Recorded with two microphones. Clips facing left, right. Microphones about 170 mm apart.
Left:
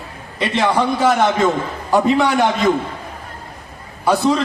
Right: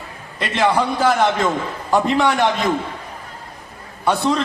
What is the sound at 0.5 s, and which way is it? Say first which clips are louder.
Speech: even; centre (ahead or behind).